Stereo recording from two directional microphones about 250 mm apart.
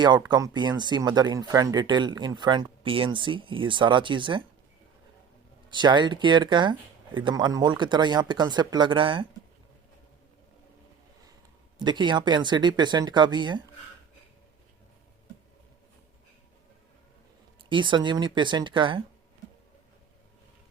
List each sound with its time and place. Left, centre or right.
0.0 s speech: centre
5.7 s speech: centre
11.8 s speech: centre
17.6 s speech: centre